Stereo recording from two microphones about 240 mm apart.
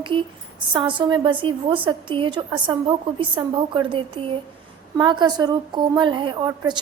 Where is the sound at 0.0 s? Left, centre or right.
Right.